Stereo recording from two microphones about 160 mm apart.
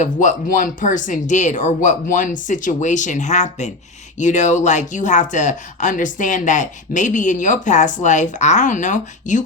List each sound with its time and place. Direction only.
0.0 s speech: 50° left (ahead or behind)